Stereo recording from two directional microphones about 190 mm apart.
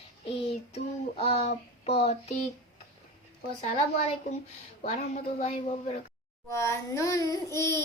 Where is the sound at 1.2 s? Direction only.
35° left (ahead or behind).